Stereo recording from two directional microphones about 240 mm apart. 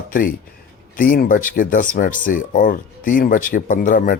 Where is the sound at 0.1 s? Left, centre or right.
Left.